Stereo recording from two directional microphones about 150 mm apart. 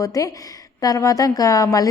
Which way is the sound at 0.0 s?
20° left (ahead or behind).